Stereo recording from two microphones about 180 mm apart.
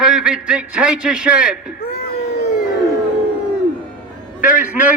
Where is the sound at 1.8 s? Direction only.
60° left (ahead or behind).